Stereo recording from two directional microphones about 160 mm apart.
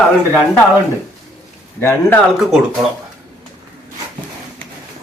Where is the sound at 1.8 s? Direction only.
15° left (ahead or behind).